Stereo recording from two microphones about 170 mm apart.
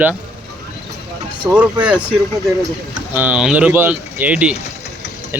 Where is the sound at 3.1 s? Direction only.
10° right (ahead or behind).